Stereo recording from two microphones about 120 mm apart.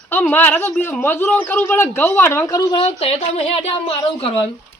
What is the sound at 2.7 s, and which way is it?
Speech, 55° left (ahead or behind).